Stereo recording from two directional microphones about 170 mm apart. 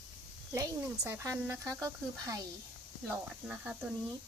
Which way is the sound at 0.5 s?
15° right (ahead or behind).